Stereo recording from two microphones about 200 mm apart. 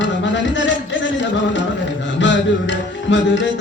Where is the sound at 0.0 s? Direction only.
65° left (ahead or behind).